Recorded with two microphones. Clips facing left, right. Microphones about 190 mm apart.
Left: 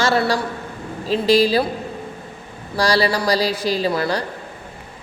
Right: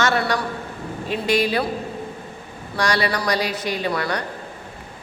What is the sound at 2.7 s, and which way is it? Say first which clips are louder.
Speech: left 4 dB; 30° left (ahead or behind).